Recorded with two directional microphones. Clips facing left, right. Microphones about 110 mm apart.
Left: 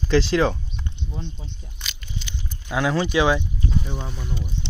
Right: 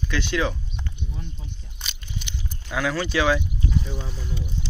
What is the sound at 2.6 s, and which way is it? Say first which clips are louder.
Speech: left 3 dB; 25° left (ahead or behind).